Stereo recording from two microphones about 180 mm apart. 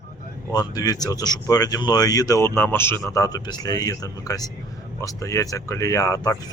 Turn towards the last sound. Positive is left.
turn(degrees=20)  # may be behind; listen again after turning